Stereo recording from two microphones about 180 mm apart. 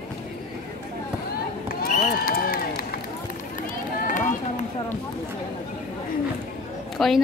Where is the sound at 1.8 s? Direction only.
55° left (ahead or behind).